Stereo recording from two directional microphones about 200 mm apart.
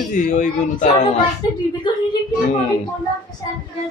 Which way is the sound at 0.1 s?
40° left (ahead or behind).